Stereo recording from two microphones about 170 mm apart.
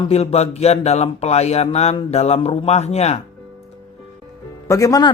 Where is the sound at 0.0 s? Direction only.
40° left (ahead or behind).